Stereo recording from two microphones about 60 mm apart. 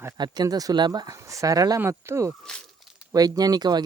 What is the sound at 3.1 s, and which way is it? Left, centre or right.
Speech, right.